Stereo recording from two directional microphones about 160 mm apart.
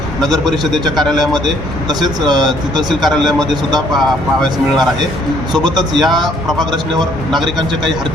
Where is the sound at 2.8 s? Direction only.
Centre (ahead or behind).